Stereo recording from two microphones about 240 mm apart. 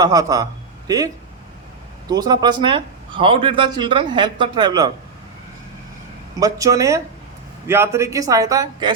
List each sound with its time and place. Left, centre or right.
0.0 s a man's voice: centre
6.4 s a man's voice: centre